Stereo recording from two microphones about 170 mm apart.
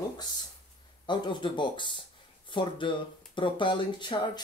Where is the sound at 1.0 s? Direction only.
25° left (ahead or behind).